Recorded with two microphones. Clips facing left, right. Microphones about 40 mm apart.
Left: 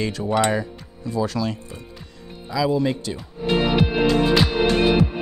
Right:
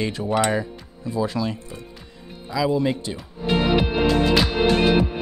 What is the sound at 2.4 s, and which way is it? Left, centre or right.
Speech, centre.